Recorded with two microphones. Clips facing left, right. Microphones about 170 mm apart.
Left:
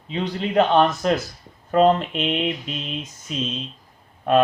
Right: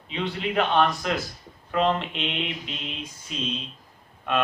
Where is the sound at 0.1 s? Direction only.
40° left (ahead or behind).